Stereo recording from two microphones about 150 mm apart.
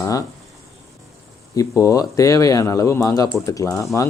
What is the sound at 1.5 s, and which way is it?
Speech, 20° left (ahead or behind).